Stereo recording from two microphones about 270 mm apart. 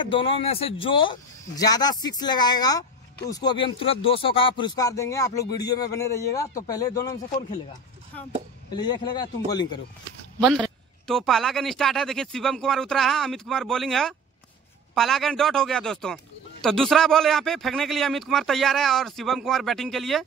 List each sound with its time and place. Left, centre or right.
0.0 s speech: centre
8.7 s speech: centre
10.4 s a man's voice: centre